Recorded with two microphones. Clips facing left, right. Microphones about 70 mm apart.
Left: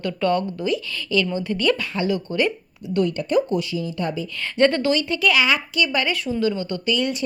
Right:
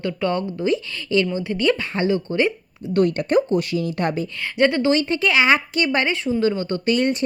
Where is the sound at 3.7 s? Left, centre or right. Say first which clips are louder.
Right 3 dB; right.